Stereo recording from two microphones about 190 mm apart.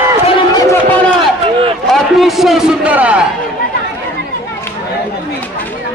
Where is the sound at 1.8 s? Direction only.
Centre (ahead or behind).